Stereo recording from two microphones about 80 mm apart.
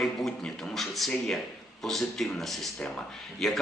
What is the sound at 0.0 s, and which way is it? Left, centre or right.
A man's voice, centre.